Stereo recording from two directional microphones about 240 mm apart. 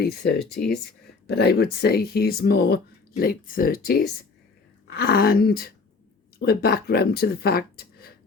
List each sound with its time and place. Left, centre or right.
0.0 s speech: left